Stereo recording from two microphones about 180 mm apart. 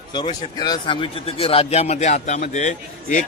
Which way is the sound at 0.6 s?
25° left (ahead or behind).